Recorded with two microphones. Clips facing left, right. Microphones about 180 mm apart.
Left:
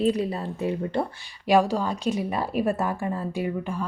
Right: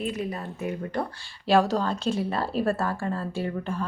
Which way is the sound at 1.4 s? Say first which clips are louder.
Left 1 dB; 15° left (ahead or behind).